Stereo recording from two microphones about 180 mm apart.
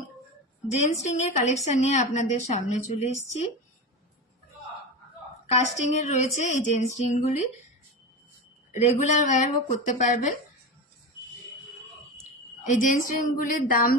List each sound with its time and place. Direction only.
1.0 s a woman's voice: 40° left (ahead or behind)
5.5 s a woman's voice: 40° left (ahead or behind)
8.7 s speech: 40° left (ahead or behind)
12.6 s speech: 45° left (ahead or behind)